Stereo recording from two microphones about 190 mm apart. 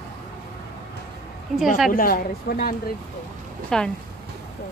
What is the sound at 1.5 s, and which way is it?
Speech, centre (ahead or behind).